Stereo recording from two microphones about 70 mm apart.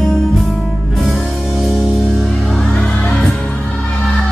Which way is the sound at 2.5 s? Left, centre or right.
Centre.